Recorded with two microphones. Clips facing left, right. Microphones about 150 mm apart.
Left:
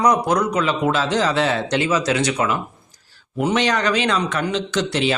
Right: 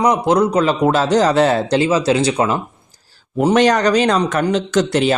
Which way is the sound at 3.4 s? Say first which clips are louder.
Right 6 dB; 45° right (ahead or behind).